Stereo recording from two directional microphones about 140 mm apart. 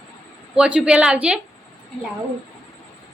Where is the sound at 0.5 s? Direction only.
5° right (ahead or behind).